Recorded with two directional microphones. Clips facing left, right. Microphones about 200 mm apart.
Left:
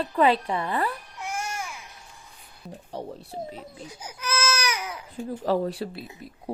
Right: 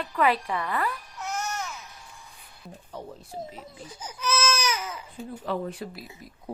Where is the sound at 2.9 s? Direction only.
35° left (ahead or behind).